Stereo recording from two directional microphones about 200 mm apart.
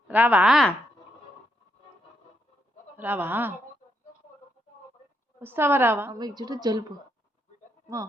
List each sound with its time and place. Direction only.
0.1 s a woman's voice: 10° right (ahead or behind)
3.0 s a woman's voice: 10° right (ahead or behind)
5.4 s a woman's voice: 10° right (ahead or behind)